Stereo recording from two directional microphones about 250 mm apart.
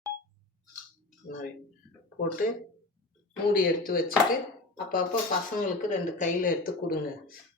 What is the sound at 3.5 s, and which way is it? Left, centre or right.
Speech, left.